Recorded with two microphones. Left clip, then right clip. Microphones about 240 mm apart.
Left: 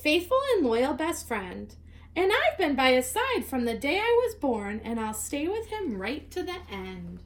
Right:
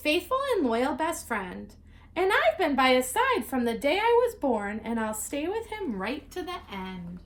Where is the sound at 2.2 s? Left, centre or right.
Centre.